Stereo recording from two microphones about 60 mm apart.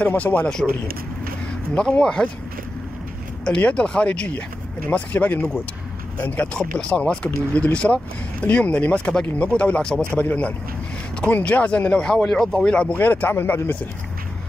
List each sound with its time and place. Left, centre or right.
0.0 s speech: left
0.5 s a man's voice: centre
3.4 s speech: centre
6.5 s speech: centre
13.0 s speech: left